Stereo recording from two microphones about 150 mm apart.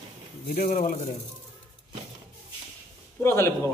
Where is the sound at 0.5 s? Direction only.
55° left (ahead or behind).